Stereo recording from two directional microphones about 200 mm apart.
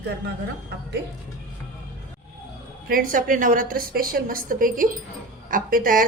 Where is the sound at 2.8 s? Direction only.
45° right (ahead or behind).